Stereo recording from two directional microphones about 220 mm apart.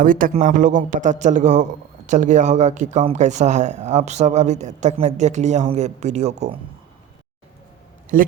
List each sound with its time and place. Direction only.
0.0 s speech: 40° right (ahead or behind)
8.1 s speech: 40° right (ahead or behind)